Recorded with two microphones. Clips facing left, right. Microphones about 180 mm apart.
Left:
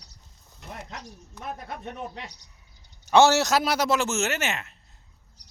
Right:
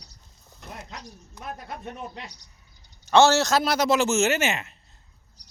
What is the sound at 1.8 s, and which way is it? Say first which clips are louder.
A man's voice: left 2 dB; 15° left (ahead or behind).